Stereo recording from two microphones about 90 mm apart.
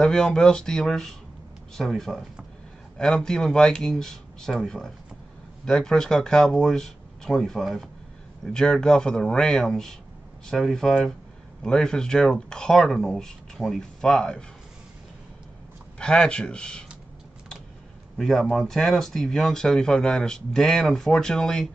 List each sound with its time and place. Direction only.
0.0 s speech: 5° left (ahead or behind)
16.0 s speech: 10° left (ahead or behind)
18.1 s speech: centre (ahead or behind)